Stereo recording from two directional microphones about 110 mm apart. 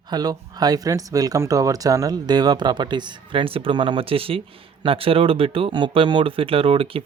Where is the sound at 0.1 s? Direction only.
40° right (ahead or behind).